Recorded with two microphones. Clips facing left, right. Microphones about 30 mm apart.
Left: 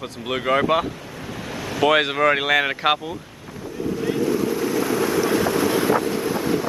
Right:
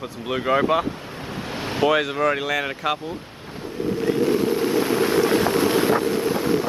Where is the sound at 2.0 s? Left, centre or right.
Left.